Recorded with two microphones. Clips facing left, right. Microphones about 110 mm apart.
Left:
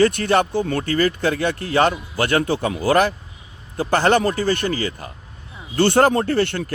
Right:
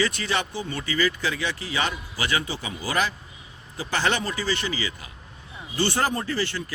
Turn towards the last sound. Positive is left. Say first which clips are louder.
# left 8 dB
turn(degrees=60)  # may be behind; listen again after turning